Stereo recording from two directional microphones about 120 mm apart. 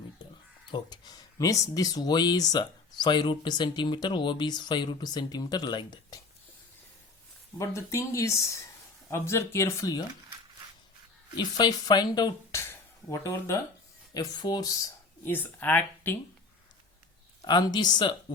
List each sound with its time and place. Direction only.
0.7 s speech: 35° left (ahead or behind)
7.6 s speech: 25° left (ahead or behind)
11.3 s speech: 35° left (ahead or behind)
12.5 s a sound: 25° left (ahead or behind)
14.1 s speech: 35° left (ahead or behind)
15.2 s speech: 15° left (ahead or behind)
17.4 s speech: 35° left (ahead or behind)